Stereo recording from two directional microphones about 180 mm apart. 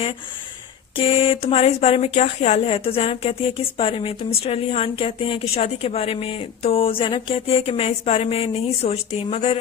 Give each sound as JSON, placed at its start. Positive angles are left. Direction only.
{"t": 0.9, "sound": "speech", "side_deg": 35}